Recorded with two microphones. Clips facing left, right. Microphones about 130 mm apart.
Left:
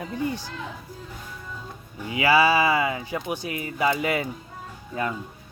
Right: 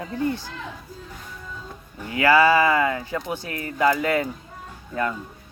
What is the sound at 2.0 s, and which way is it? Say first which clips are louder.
Speech: right 2 dB; 15° left (ahead or behind).